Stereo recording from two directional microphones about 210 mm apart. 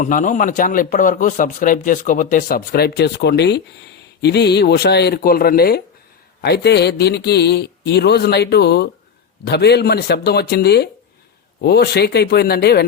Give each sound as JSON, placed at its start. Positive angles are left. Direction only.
{"t": 0.0, "sound": "a man's voice", "side_deg": 40}